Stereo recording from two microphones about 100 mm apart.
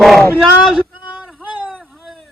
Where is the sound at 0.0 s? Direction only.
Centre (ahead or behind).